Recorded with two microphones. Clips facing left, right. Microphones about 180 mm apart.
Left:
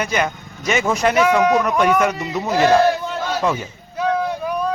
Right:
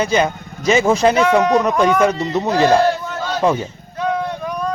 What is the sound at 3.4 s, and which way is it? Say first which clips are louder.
Speech: right 5 dB; 30° right (ahead or behind).